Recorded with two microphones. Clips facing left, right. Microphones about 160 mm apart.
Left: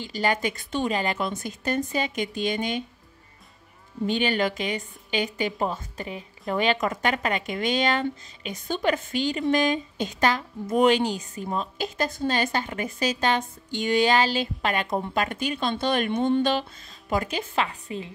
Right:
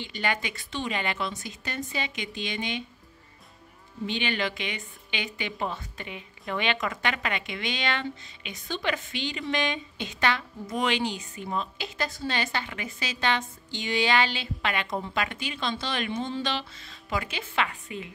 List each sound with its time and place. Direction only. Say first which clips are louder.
0.0 s a woman's voice: left 5 dB; 40° left (ahead or behind)
4.0 s a woman's voice: left 6 dB; 45° left (ahead or behind)